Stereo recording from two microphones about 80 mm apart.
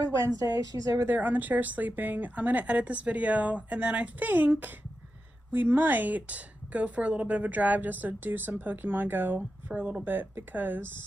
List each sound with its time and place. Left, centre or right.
0.0 s a woman's voice: right
1.0 s a woman's voice: right
9.7 s speech: centre
10.0 s a woman's voice: right